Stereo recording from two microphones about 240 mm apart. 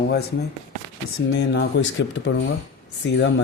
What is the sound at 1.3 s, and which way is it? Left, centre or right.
Speech, left.